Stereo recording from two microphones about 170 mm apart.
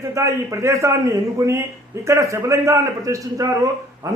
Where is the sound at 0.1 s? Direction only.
15° right (ahead or behind).